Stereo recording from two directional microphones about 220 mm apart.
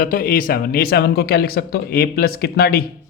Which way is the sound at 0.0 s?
40° left (ahead or behind).